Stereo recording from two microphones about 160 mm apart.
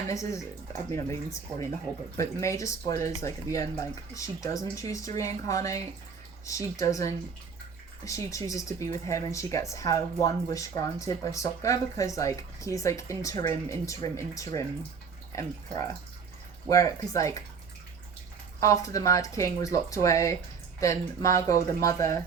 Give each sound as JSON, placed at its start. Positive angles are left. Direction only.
{"t": 0.1, "sound": "speech", "side_deg": 20}
{"t": 16.6, "sound": "speech", "side_deg": 20}
{"t": 18.6, "sound": "speech", "side_deg": 20}